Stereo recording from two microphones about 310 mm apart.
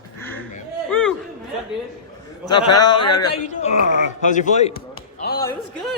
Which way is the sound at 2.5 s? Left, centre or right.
Centre.